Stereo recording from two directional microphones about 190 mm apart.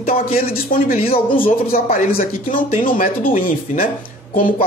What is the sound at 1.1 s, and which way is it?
Speech, 30° left (ahead or behind).